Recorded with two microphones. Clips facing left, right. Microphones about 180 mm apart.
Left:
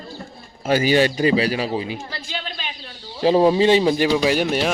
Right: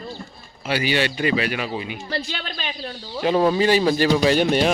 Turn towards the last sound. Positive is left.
turn(degrees=5)  # may be behind; listen again after turning